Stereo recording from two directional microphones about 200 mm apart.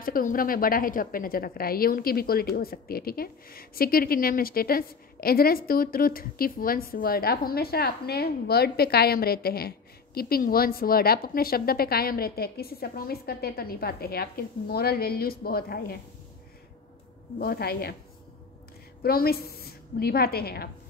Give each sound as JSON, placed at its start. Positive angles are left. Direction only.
{"t": 0.0, "sound": "a woman's voice", "side_deg": 45}
{"t": 17.4, "sound": "a woman's voice", "side_deg": 50}
{"t": 19.0, "sound": "a woman's voice", "side_deg": 50}